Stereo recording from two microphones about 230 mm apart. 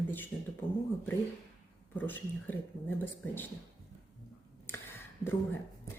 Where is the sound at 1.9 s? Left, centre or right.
Centre.